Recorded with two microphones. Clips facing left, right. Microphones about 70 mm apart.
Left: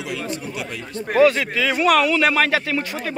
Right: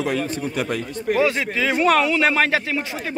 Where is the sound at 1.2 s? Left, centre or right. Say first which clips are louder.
Left 6 dB; right.